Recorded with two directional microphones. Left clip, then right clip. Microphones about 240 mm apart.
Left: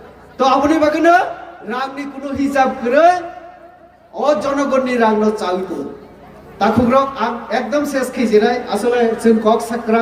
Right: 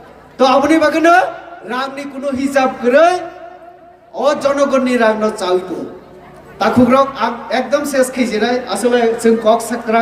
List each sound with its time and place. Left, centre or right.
0.3 s a man's voice: centre
6.6 s a man's voice: centre